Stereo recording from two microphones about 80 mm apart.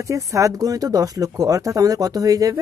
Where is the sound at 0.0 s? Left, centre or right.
Right.